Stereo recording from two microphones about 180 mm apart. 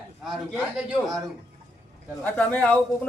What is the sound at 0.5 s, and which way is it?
Speech, 5° right (ahead or behind).